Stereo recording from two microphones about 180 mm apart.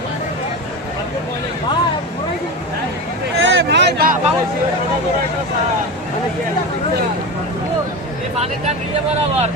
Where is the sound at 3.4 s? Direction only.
85° right; by 4.1 s 60° right (ahead or behind).